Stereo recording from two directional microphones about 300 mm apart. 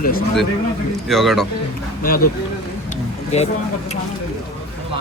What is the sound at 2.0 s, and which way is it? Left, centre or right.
Speech, left.